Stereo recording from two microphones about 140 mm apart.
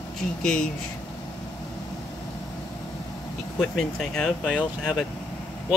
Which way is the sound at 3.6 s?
Centre (ahead or behind).